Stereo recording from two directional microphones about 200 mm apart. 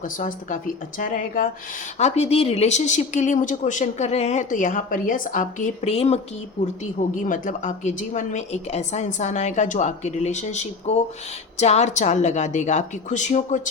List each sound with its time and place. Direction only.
0.2 s speech: 40° left (ahead or behind)
7.3 s speech: 40° left (ahead or behind)